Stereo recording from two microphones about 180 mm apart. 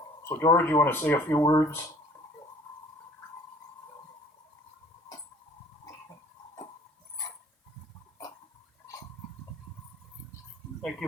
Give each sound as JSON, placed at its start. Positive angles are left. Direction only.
{"t": 0.3, "sound": "speech", "side_deg": 15}